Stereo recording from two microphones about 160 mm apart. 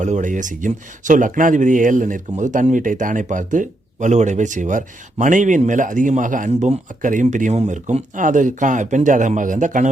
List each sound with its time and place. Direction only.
0.0 s speech: 50° right (ahead or behind)